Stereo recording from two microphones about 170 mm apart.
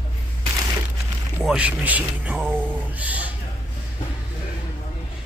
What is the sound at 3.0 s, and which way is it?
Bleat, 10° right (ahead or behind).